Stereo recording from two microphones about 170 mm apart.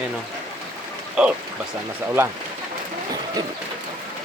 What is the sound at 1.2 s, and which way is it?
Speech, 5° right (ahead or behind).